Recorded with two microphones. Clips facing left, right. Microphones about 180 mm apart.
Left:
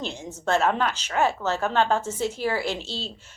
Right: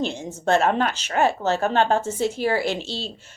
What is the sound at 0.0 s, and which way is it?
A woman's voice, 60° right (ahead or behind).